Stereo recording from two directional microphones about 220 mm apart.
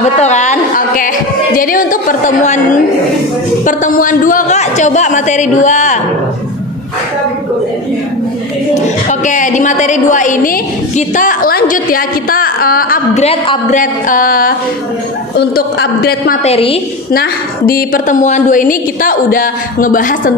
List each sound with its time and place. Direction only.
0.2 s a woman's voice: 30° left (ahead or behind)
8.8 s a woman's voice: 35° left (ahead or behind)
16.4 s a woman's voice: 25° left (ahead or behind)
17.1 s a woman's voice: 40° left (ahead or behind)